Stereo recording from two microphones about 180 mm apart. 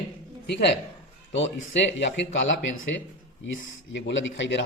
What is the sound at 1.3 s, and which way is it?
Speech, 90° left.